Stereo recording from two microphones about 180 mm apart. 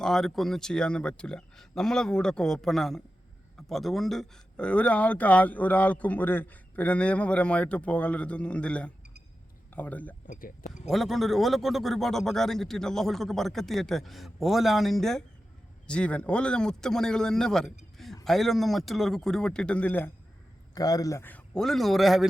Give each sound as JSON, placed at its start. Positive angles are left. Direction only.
{"t": 0.0, "sound": "a man's voice", "side_deg": 0}
{"t": 10.2, "sound": "speech", "side_deg": 50}
{"t": 10.8, "sound": "a man's voice", "side_deg": 0}
{"t": 17.9, "sound": "a sound", "side_deg": 0}
{"t": 18.3, "sound": "a man's voice", "side_deg": 0}
{"t": 20.7, "sound": "a man's voice", "side_deg": 20}